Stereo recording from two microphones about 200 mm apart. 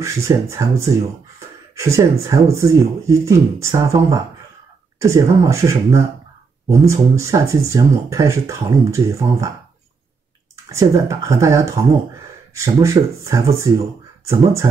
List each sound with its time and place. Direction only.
0.0 s speech: 15° right (ahead or behind)
10.5 s speech: 15° right (ahead or behind)